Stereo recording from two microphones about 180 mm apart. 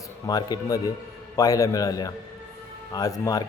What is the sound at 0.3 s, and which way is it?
A man's voice, 20° left (ahead or behind).